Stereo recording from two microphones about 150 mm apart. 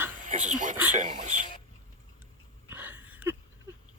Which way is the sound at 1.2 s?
55° right (ahead or behind).